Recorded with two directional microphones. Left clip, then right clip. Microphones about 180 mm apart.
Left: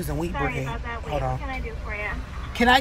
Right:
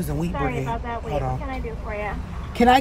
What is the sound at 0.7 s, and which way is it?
Speech, 40° right (ahead or behind).